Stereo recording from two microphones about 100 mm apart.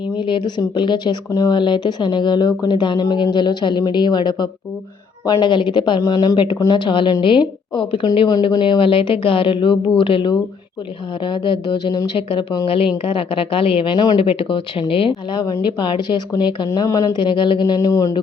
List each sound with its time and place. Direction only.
0.3 s speech: 50° left (ahead or behind)
6.0 s speech: 35° left (ahead or behind)
6.3 s speech: 55° left (ahead or behind)
16.7 s speech: 35° left (ahead or behind); by 17.6 s 55° left (ahead or behind)
17.7 s speech: 35° left (ahead or behind)